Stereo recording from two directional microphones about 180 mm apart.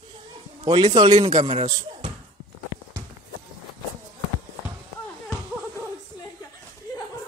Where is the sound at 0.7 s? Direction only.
25° right (ahead or behind).